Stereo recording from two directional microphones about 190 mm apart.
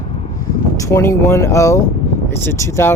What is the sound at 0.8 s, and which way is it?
Speech, 15° left (ahead or behind).